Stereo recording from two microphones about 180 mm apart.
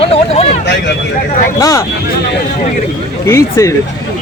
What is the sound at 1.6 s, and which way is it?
Speech, 20° left (ahead or behind).